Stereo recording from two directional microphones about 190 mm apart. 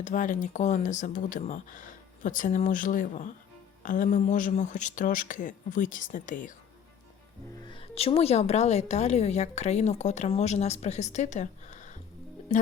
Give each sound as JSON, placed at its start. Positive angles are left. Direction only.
{"t": 0.0, "sound": "speech", "side_deg": 45}
{"t": 7.7, "sound": "speech", "side_deg": 30}